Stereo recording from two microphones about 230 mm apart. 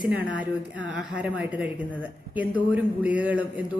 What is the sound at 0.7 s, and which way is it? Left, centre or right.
Speech, right.